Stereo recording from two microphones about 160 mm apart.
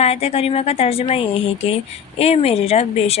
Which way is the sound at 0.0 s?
40° left (ahead or behind).